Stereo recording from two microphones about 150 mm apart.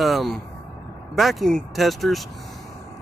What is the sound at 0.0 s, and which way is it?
Speech, centre (ahead or behind).